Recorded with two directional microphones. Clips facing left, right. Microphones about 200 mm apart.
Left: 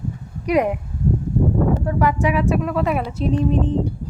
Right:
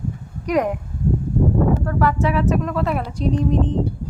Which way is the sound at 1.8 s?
15° left (ahead or behind).